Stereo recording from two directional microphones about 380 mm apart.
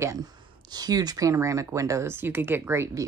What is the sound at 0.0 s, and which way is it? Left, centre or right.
Speech, centre.